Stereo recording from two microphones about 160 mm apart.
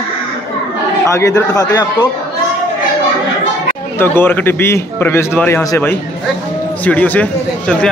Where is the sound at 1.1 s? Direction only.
20° left (ahead or behind).